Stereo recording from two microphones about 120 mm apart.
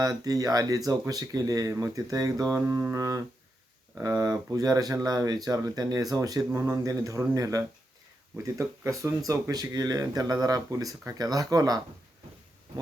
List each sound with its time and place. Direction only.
0.0 s speech: 30° right (ahead or behind)
4.0 s speech: 25° right (ahead or behind)